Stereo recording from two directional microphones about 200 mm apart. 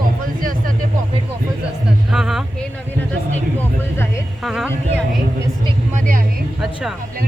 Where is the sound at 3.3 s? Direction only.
10° left (ahead or behind).